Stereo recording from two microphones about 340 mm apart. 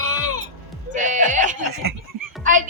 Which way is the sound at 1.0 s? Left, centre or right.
Right.